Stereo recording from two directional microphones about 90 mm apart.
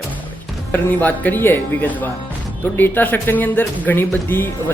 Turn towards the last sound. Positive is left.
turn(degrees=25)  # may be behind; listen again after turning